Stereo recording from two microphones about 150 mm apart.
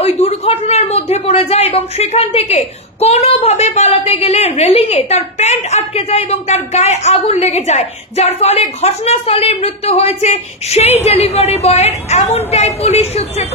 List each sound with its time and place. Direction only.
0.0 s speech: 45° left (ahead or behind)